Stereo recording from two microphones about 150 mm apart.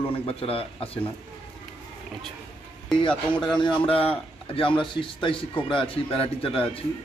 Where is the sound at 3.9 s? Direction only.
40° left (ahead or behind).